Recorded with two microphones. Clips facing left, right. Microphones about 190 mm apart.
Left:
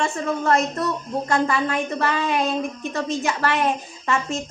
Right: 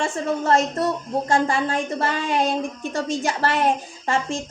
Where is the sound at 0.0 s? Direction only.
30° right (ahead or behind).